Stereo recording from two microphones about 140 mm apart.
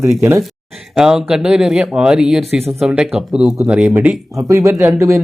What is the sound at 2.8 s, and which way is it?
Speech, 5° right (ahead or behind).